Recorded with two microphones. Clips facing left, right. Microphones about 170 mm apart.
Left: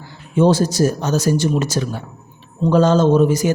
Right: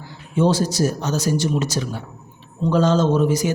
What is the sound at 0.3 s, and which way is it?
A man's voice, 50° left (ahead or behind).